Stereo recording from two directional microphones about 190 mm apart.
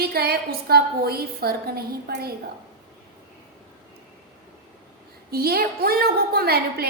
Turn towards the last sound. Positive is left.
turn(degrees=-55)  # may be behind; listen again after turning